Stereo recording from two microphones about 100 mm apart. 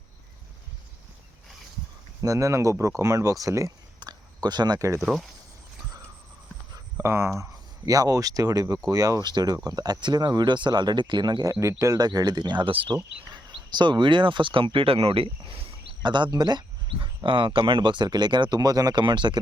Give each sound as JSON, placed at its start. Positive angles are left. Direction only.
{"t": 2.2, "sound": "speech", "side_deg": -35}
{"t": 4.0, "sound": "a sound", "side_deg": -45}
{"t": 4.9, "sound": "speech", "side_deg": -5}
{"t": 6.9, "sound": "speech", "side_deg": -25}
{"t": 7.9, "sound": "speech", "side_deg": -35}
{"t": 11.6, "sound": "speech", "side_deg": -30}
{"t": 11.9, "sound": "speech", "side_deg": -40}
{"t": 16.0, "sound": "speech", "side_deg": -50}
{"t": 17.2, "sound": "speech", "side_deg": -55}